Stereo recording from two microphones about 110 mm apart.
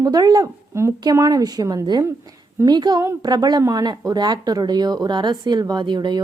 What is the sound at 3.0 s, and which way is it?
Speech, 25° right (ahead or behind).